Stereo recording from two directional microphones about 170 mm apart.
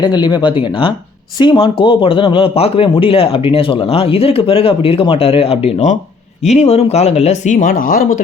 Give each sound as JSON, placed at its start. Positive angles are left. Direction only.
{"t": 0.0, "sound": "speech", "side_deg": 25}